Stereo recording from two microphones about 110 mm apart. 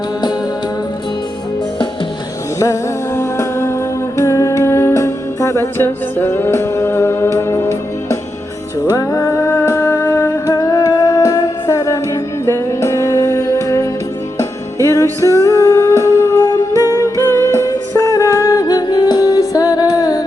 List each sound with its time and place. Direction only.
3.2 s music: 25° left (ahead or behind)
10.4 s music: 35° left (ahead or behind)